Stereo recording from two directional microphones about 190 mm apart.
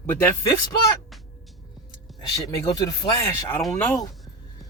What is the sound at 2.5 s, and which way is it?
Speech, 20° left (ahead or behind).